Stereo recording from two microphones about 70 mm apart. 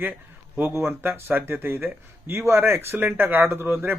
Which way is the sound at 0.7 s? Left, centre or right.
Right.